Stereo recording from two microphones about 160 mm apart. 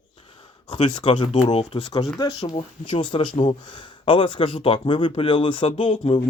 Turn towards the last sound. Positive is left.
turn(degrees=35)  # may be behind; listen again after turning